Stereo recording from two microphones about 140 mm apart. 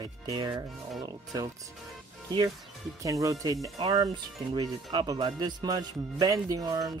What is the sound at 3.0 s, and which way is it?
Speech, 25° right (ahead or behind).